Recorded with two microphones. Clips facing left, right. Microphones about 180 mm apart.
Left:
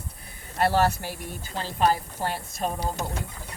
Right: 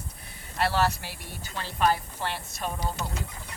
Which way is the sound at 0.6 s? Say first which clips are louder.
Left 4 dB; 45° left (ahead or behind).